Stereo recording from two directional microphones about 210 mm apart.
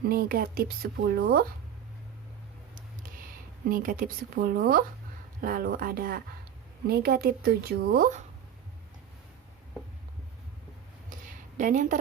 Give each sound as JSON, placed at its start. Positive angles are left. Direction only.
{"t": 0.0, "sound": "speech", "side_deg": -45}
{"t": 3.7, "sound": "speech", "side_deg": -40}
{"t": 11.1, "sound": "a sound", "side_deg": -40}